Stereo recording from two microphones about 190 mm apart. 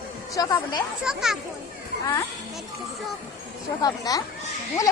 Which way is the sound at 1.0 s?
Centre (ahead or behind).